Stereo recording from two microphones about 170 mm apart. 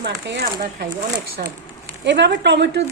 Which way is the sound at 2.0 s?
90° right.